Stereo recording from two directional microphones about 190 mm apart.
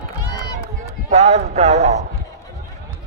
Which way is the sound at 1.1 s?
35° right (ahead or behind).